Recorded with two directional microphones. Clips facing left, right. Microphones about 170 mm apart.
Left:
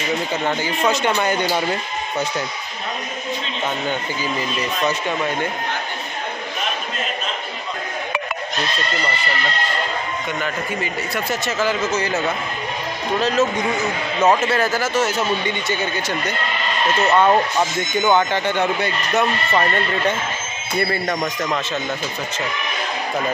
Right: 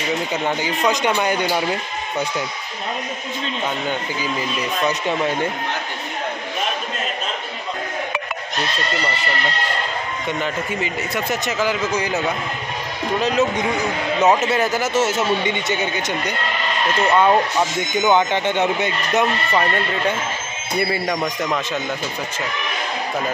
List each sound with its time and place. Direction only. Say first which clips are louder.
0.3 s a man's voice: even; 15° right (ahead or behind)
10.4 s a man's voice: right 1 dB; 20° right (ahead or behind)
17.2 s speech: even; centre (ahead or behind)
18.1 s speech: right 1 dB; 20° right (ahead or behind)
20.8 s a man's voice: even; 10° right (ahead or behind)